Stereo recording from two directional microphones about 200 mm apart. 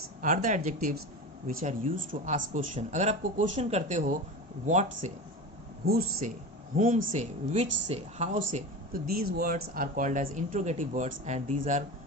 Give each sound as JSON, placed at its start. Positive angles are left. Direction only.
{"t": 0.2, "sound": "speech", "side_deg": -40}
{"t": 5.8, "sound": "speech", "side_deg": -50}
{"t": 6.7, "sound": "speech", "side_deg": -40}